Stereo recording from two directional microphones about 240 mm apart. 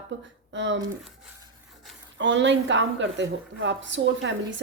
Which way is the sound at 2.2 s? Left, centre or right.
Right.